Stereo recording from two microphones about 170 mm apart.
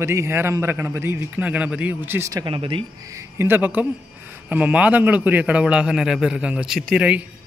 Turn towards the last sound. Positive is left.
turn(degrees=-5)  # may be behind; listen again after turning